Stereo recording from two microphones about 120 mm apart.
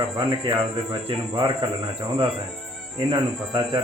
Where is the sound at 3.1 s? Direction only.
40° right (ahead or behind).